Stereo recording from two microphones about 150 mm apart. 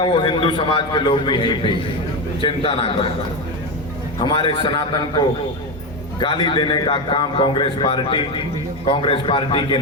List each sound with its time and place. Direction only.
0.0 s a man's voice: 30° left (ahead or behind)
4.2 s a man's voice: 30° left (ahead or behind)